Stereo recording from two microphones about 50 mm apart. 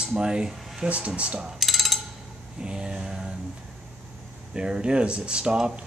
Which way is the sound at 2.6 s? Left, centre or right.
Centre.